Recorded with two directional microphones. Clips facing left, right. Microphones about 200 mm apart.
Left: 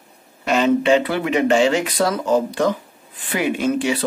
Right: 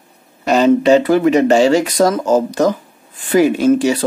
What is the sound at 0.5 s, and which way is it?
Speech, 40° right (ahead or behind).